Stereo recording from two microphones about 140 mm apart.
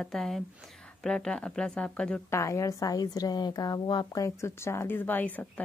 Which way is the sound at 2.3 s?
20° left (ahead or behind).